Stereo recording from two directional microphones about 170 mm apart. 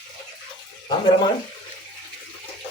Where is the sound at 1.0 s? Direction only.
25° left (ahead or behind).